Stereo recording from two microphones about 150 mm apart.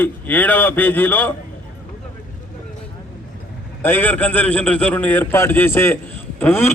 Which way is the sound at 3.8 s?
10° left (ahead or behind).